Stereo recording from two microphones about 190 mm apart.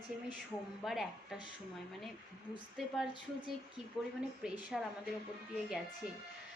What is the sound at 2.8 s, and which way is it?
Speech, centre (ahead or behind).